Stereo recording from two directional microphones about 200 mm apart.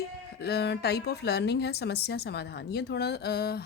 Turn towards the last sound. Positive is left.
turn(degrees=50)  # may be behind; listen again after turning